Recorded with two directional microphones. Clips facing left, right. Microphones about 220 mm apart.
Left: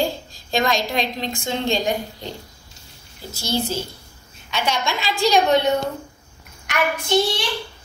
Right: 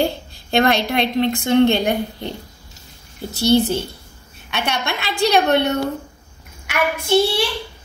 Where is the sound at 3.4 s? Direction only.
65° right (ahead or behind).